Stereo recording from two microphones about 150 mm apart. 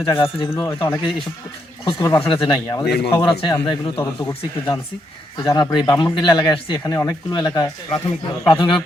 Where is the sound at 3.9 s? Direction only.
20° left (ahead or behind).